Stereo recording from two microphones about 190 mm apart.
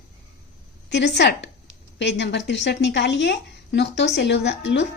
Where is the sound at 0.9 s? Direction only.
65° left (ahead or behind).